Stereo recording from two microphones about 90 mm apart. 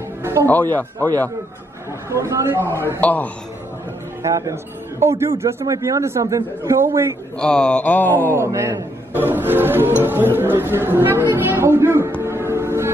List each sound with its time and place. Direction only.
0.2 s music: 35° right (ahead or behind)
0.5 s speech: 20° left (ahead or behind)
2.0 s speech: 30° right (ahead or behind)
3.0 s speech: 15° left (ahead or behind)
4.2 s a man's voice: 35° right (ahead or behind)
7.3 s speech: 10° left (ahead or behind)
8.4 s a woman's voice: 30° right (ahead or behind)